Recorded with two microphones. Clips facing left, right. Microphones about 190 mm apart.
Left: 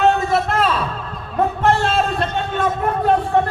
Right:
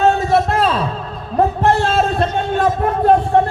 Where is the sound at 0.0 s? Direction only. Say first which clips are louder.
Right 2 dB; 35° right (ahead or behind).